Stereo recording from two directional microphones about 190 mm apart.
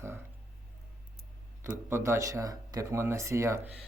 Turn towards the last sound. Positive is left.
turn(degrees=-15)  # may be behind; listen again after turning